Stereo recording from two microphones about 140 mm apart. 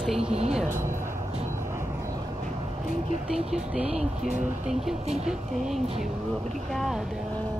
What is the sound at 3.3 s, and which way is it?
Speech, 5° right (ahead or behind).